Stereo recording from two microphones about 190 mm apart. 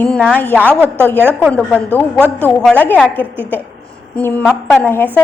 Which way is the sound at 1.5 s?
5° left (ahead or behind).